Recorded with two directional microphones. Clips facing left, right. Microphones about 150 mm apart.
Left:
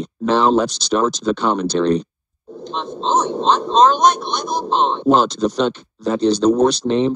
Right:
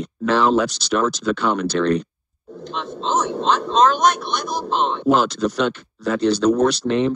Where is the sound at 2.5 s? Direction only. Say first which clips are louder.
Left 2 dB; 30° left (ahead or behind).